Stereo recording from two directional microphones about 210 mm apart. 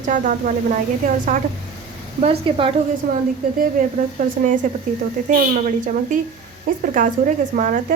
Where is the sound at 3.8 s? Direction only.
40° right (ahead or behind).